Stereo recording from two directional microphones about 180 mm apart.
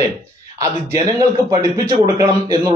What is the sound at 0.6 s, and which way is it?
Speech, 15° right (ahead or behind).